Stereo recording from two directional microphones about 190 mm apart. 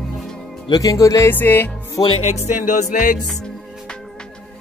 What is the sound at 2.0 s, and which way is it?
Music, 35° left (ahead or behind).